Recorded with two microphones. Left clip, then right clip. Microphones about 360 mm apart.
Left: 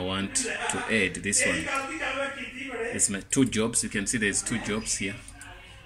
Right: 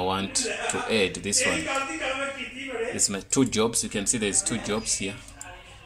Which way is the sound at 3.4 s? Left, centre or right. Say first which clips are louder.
Right 2 dB; centre.